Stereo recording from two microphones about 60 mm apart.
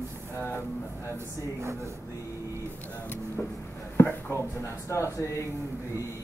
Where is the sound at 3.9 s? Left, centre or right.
Left.